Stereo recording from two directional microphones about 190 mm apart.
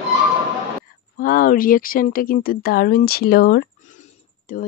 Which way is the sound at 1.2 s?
45° left (ahead or behind).